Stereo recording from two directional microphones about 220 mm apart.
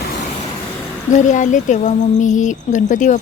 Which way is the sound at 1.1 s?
35° left (ahead or behind).